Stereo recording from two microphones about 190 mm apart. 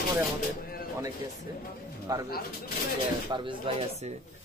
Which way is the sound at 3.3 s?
25° right (ahead or behind).